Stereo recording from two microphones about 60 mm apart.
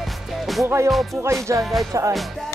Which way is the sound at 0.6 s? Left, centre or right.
Right.